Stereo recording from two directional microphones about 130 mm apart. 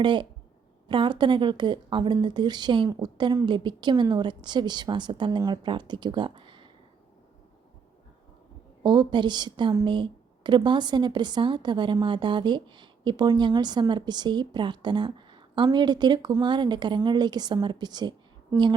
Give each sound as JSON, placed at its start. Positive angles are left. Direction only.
{"t": 0.0, "sound": "a woman's voice", "side_deg": -40}
{"t": 8.8, "sound": "a woman's voice", "side_deg": -35}